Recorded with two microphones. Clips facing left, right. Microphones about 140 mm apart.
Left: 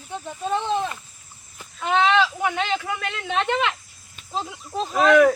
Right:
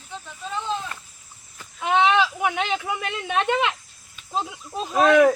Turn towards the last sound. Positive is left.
turn(degrees=-30)  # may be behind; listen again after turning